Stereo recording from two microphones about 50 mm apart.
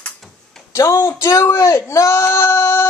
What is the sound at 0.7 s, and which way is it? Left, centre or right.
Speech, left.